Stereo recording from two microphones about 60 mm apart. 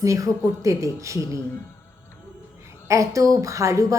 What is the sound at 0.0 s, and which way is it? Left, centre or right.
Speech, right.